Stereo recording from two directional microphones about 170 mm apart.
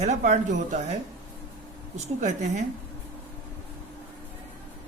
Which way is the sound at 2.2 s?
45° right (ahead or behind).